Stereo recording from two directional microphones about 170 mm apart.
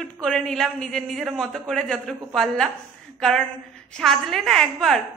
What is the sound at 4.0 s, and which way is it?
A woman's voice, centre (ahead or behind).